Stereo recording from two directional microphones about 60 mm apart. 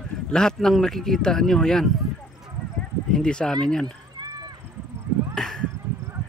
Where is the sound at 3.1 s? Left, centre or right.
Centre.